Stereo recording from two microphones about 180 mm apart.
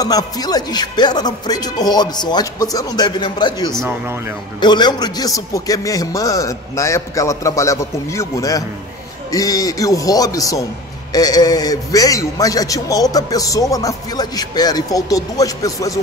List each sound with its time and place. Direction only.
0.0 s a man's voice: 20° left (ahead or behind)